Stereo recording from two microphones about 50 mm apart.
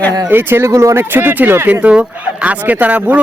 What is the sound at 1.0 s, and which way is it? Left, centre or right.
Speech, right.